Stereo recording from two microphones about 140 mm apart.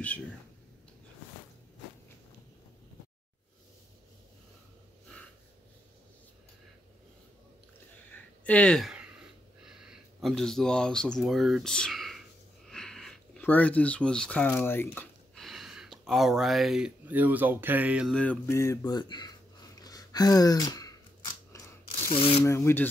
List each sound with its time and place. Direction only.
8.1 s a sound: 10° left (ahead or behind)
13.4 s speech: 10° left (ahead or behind)
15.3 s speech: centre (ahead or behind)
18.1 s speech: 10° left (ahead or behind); by 20.9 s 25° left (ahead or behind)
21.5 s mechanisms: 20° left (ahead or behind)
22.1 s speech: 40° left (ahead or behind)
22.4 s speech: 20° left (ahead or behind)